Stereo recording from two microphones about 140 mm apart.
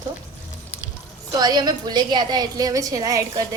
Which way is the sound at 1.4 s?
30° right (ahead or behind).